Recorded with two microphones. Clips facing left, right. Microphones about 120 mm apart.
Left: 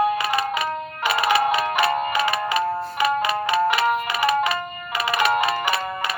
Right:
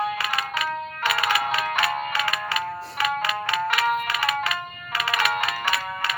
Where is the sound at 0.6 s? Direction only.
20° left (ahead or behind).